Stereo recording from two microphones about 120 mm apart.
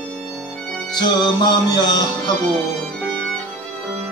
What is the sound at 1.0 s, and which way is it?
Music, 35° left (ahead or behind).